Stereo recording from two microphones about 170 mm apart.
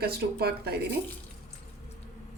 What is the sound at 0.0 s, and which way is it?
Speech, 70° right (ahead or behind).